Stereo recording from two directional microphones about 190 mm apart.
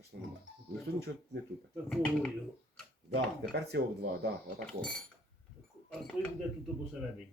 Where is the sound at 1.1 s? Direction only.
85° right.